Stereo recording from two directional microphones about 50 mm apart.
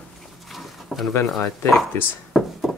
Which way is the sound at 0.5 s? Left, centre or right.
Centre.